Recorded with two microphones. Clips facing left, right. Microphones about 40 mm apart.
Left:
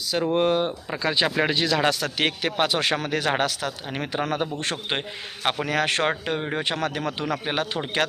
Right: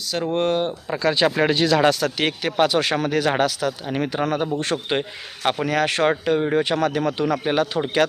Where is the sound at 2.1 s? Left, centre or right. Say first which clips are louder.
Right 3 dB; left.